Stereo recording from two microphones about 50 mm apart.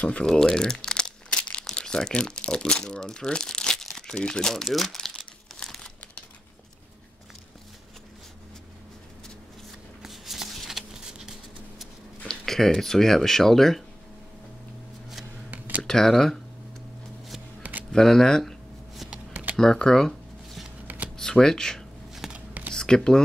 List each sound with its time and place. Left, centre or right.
0.2 s crumpling: centre
4.1 s speech: centre
4.6 s speech: centre
4.9 s crumpling: centre
10.0 s shuffling cards: centre
12.3 s speech: centre
15.5 s a sound: right
15.8 s speech: centre
17.9 s speech: centre
19.5 s speech: centre
20.8 s a sound: right
21.2 s speech: centre
22.2 s a sound: centre
22.7 s a sound: centre